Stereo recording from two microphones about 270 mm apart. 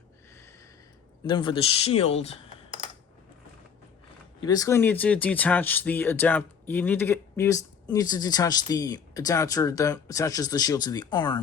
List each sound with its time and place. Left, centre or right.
1.2 s speech: centre
4.4 s speech: centre